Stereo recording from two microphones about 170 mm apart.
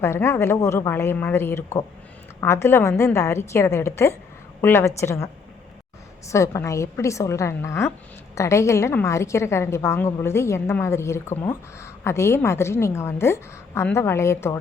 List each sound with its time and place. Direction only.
0.0 s a woman's voice: 15° left (ahead or behind)